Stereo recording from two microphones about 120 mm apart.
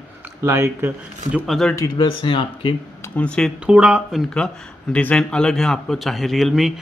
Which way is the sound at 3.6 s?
10° right (ahead or behind).